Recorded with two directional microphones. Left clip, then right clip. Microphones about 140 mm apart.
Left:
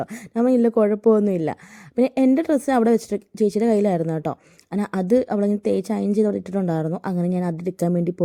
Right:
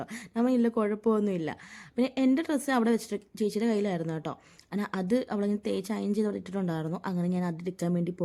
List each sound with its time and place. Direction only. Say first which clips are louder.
0.0 s a woman's voice: left 9 dB; 30° left (ahead or behind)